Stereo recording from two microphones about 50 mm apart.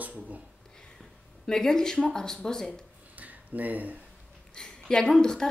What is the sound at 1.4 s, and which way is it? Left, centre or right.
Speech, centre.